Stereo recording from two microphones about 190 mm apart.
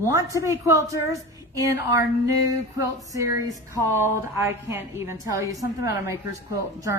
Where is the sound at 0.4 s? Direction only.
15° right (ahead or behind).